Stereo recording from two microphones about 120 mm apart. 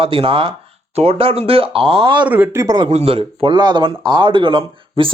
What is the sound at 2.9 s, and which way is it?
Speech, 50° right (ahead or behind).